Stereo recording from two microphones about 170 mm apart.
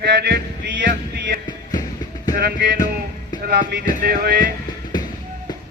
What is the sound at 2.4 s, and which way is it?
Music, 80° right.